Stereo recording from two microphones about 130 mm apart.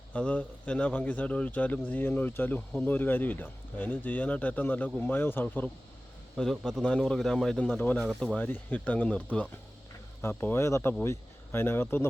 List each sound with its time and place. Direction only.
0.1 s a man's voice: 10° left (ahead or behind)
6.3 s a man's voice: 5° left (ahead or behind)